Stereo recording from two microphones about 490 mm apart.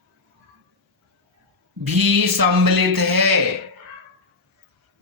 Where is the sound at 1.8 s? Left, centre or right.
Right.